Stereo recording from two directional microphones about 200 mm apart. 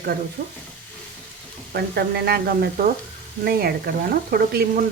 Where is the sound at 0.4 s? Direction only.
40° right (ahead or behind).